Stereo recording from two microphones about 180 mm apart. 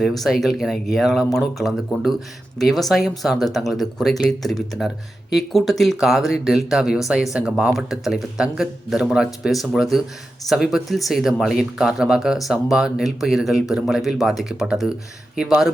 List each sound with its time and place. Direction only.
0.0 s speech: centre (ahead or behind)